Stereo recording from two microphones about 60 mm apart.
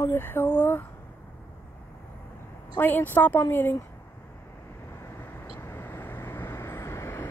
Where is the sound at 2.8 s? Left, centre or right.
Left.